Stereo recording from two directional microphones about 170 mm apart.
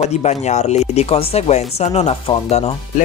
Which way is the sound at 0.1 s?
40° left (ahead or behind).